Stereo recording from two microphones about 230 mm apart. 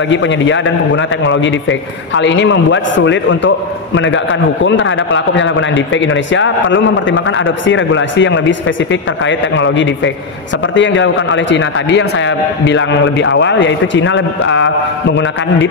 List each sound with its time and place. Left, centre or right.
0.1 s a man's voice: left